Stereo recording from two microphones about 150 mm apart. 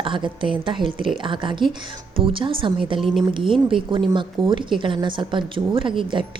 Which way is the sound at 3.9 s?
35° right (ahead or behind).